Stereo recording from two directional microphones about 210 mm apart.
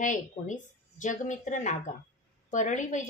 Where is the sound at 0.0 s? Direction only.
35° left (ahead or behind).